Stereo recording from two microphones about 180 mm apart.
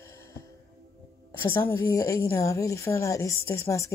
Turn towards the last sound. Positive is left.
turn(degrees=15)  # may be behind; listen again after turning